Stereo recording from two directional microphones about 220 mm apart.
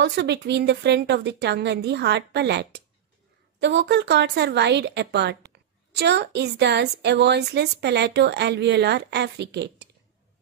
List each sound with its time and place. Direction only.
0.0 s a woman's voice: 50° right (ahead or behind)